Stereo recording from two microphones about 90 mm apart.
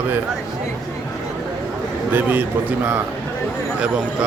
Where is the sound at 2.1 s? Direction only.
20° right (ahead or behind).